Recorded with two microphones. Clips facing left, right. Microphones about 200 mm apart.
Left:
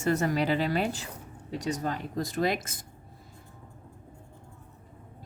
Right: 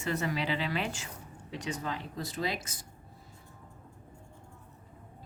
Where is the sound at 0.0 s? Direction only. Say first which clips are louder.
Left 6 dB; 45° left (ahead or behind).